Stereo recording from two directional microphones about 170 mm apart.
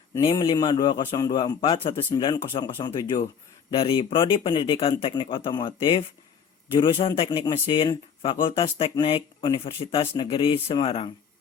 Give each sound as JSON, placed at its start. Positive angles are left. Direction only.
{"t": 0.2, "sound": "a man's voice", "side_deg": 30}